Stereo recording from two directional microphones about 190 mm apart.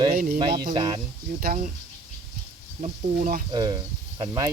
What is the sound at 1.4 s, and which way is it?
Speech, 45° right (ahead or behind).